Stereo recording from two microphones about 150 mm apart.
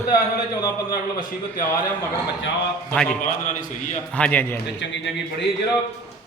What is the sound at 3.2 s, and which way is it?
Speech, 60° left (ahead or behind).